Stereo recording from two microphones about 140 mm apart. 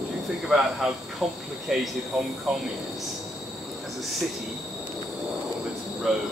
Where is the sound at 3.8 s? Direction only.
Centre (ahead or behind).